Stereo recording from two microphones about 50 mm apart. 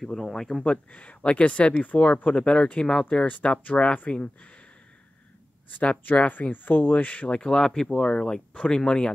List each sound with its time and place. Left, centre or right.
0.0 s speech: centre
0.7 s speech: left
5.7 s speech: left